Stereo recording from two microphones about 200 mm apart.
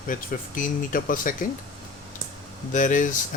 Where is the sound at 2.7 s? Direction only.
40° left (ahead or behind).